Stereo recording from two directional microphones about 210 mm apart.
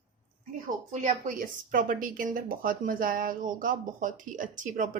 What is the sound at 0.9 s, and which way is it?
A woman's voice, 35° right (ahead or behind).